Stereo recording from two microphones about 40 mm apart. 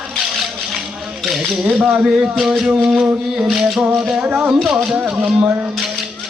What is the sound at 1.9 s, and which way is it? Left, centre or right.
Speech, right.